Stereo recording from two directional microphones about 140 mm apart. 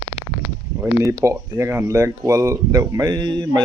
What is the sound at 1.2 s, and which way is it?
Speech, 20° right (ahead or behind).